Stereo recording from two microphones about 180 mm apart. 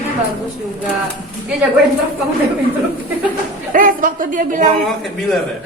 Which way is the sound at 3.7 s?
50° right (ahead or behind).